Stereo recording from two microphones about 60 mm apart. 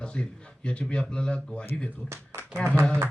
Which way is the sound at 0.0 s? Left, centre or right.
Centre.